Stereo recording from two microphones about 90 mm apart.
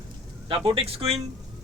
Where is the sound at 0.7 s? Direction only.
90° right.